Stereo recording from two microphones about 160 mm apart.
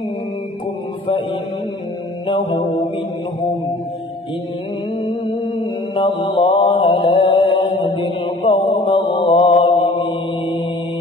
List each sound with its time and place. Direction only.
2.2 s mantra: 30° left (ahead or behind)
5.6 s mantra: 35° left (ahead or behind)